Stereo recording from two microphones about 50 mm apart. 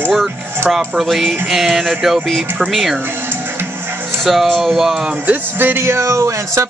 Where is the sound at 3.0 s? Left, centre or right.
Right.